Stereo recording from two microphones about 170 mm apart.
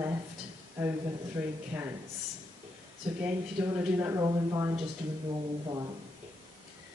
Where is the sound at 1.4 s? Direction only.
10° right (ahead or behind).